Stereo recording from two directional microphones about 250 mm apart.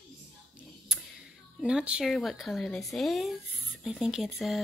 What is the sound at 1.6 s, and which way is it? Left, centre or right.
Speech, centre.